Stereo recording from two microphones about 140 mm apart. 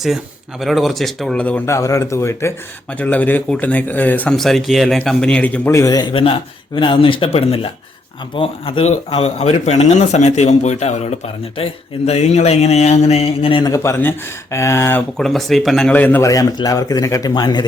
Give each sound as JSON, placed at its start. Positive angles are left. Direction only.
{"t": 0.6, "sound": "a man's voice", "side_deg": 0}
{"t": 4.4, "sound": "a man's voice", "side_deg": 0}
{"t": 13.7, "sound": "speech", "side_deg": 20}
{"t": 15.2, "sound": "speech", "side_deg": 0}
{"t": 16.3, "sound": "speech", "side_deg": 25}